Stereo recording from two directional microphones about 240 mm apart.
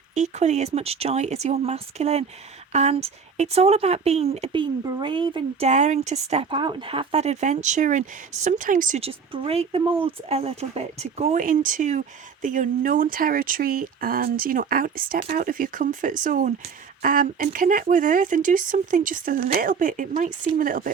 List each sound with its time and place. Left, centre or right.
0.1 s speech: right